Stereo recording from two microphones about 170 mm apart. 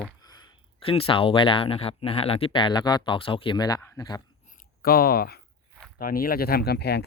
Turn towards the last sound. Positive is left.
turn(degrees=70)  # may be behind; listen again after turning